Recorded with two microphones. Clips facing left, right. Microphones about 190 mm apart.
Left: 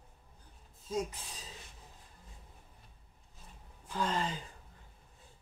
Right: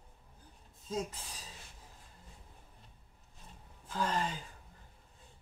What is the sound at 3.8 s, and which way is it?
Speech, 20° left (ahead or behind).